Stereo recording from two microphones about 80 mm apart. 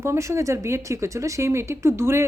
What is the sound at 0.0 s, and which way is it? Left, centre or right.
A woman's voice, right.